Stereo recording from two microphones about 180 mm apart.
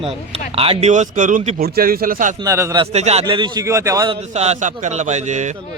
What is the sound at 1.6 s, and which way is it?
Speech, 55° right (ahead or behind).